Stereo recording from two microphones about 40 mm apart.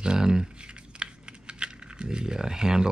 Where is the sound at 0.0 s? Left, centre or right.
Centre.